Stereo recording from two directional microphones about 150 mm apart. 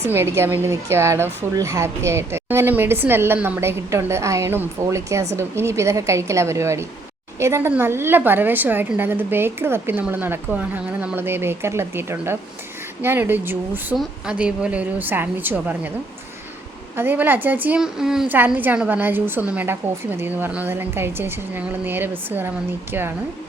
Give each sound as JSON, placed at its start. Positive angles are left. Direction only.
{"t": 0.0, "sound": "a woman's voice", "side_deg": -15}
{"t": 13.9, "sound": "a woman's voice", "side_deg": -5}
{"t": 17.0, "sound": "a woman's voice", "side_deg": -15}